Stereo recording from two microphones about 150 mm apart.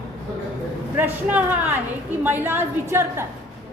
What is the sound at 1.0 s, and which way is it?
A woman's voice, 10° right (ahead or behind).